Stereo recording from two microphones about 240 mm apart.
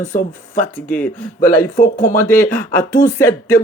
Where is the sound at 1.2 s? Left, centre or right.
Left.